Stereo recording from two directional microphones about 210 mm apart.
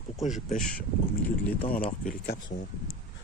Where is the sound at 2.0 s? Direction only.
40° left (ahead or behind).